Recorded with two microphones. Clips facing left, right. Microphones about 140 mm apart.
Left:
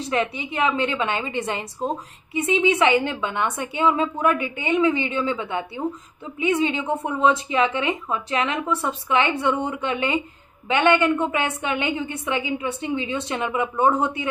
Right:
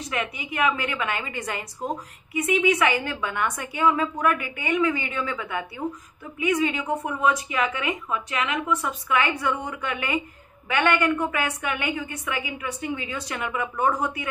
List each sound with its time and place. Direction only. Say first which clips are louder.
0.0 s a woman's voice: left 6 dB; 30° left (ahead or behind)